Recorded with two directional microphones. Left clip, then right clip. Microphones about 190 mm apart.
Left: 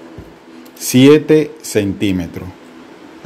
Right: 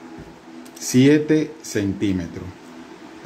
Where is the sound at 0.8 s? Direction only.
35° left (ahead or behind).